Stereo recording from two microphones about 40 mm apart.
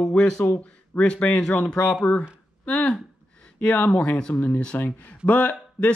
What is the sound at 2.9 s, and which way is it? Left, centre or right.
Gasp, left.